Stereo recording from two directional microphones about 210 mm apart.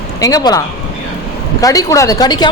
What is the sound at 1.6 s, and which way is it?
Speech, 15° left (ahead or behind).